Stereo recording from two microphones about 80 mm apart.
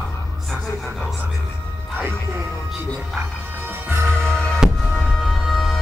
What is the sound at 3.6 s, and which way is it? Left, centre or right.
Music, right.